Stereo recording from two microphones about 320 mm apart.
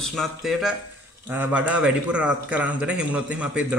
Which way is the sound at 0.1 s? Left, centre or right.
Centre.